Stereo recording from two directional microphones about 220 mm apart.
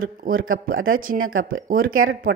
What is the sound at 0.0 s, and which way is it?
A woman's voice, 40° right (ahead or behind).